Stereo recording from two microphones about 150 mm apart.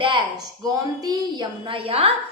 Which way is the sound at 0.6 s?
25° right (ahead or behind).